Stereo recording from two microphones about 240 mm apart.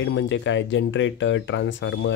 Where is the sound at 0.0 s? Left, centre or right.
Left.